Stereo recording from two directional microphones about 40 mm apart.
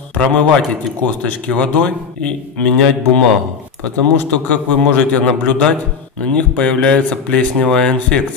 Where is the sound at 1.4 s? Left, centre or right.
Left.